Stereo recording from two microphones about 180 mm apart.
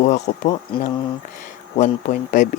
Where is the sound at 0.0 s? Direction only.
40° left (ahead or behind).